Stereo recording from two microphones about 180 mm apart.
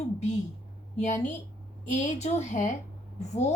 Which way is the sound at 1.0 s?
40° left (ahead or behind).